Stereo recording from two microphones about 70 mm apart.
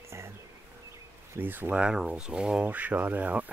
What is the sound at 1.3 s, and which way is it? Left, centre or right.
Speech, right.